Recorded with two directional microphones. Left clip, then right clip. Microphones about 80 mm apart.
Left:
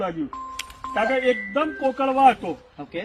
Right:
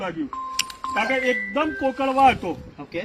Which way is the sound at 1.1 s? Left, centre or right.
Centre.